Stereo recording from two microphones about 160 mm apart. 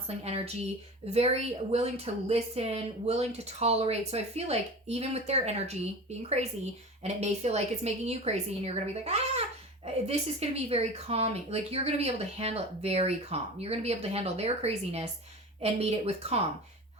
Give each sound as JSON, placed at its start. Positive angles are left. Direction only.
{"t": 0.3, "sound": "a woman's voice", "side_deg": -40}